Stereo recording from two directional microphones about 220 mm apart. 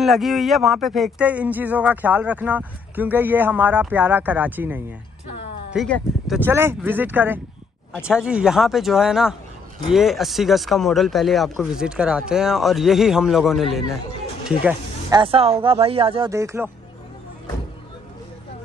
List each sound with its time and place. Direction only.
0.0 s speech: centre (ahead or behind)
5.7 s speech: centre (ahead or behind)
15.0 s speech: 20° right (ahead or behind)
16.3 s speech: 15° right (ahead or behind)